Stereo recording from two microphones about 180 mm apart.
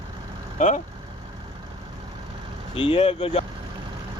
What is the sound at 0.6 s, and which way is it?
Speech, 40° left (ahead or behind).